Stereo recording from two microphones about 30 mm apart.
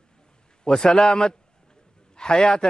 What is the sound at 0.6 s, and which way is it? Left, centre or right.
A man's voice, left.